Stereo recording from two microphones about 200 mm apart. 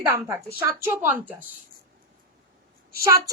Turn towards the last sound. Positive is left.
turn(degrees=-15)  # may be behind; listen again after turning